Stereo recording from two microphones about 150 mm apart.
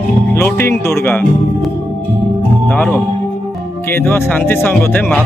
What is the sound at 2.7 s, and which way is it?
Speech, 10° left (ahead or behind).